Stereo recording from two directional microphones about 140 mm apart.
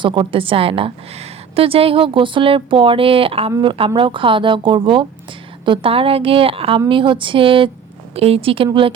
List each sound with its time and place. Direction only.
0.0 s a woman's voice: 35° right (ahead or behind)